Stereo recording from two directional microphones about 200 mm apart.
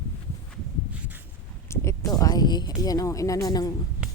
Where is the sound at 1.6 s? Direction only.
15° left (ahead or behind).